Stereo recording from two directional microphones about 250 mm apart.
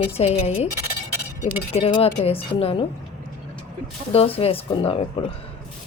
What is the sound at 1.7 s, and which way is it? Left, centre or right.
A woman's voice, left.